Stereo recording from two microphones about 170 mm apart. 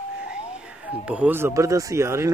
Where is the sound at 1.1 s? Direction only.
10° right (ahead or behind).